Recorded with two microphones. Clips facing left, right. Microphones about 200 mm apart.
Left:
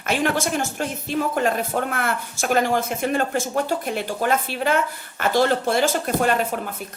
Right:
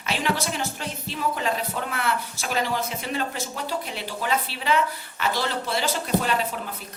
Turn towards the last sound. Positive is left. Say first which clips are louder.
# left 4 dB
turn(degrees=50)  # may be behind; listen again after turning